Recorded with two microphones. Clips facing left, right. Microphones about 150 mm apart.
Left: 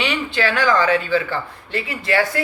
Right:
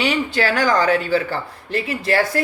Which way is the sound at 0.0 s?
40° right (ahead or behind).